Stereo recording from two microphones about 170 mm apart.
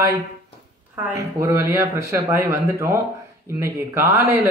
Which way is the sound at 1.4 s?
15° right (ahead or behind).